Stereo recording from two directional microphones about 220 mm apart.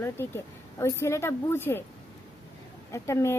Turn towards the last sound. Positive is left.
turn(degrees=15)  # may be behind; listen again after turning